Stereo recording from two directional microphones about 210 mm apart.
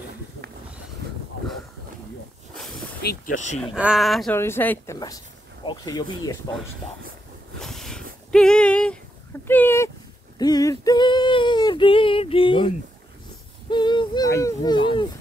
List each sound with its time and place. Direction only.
3.0 s speech: 50° left (ahead or behind)
3.7 s speech: 5° right (ahead or behind); by 6.5 s 20° left (ahead or behind)
7.6 s a sound: centre (ahead or behind)
9.5 s speech: 10° left (ahead or behind)
10.4 s female singing: 15° left (ahead or behind)